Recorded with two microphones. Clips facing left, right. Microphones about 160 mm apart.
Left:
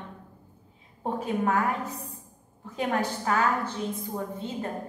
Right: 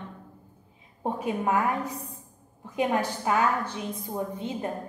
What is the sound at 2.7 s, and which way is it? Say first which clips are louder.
A woman's voice: right 2 dB; 15° right (ahead or behind).